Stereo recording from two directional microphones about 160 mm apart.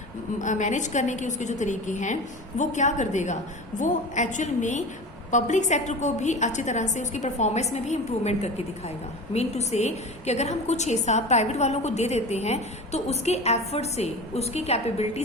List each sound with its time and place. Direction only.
0.4 s a woman's voice: 50° left (ahead or behind)